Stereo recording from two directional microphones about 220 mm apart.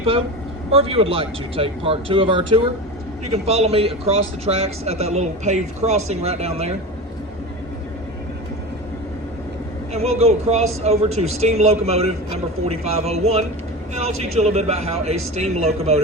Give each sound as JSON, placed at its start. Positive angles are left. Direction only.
{"t": 0.7, "sound": "a man's voice", "side_deg": -25}
{"t": 9.9, "sound": "a man's voice", "side_deg": -30}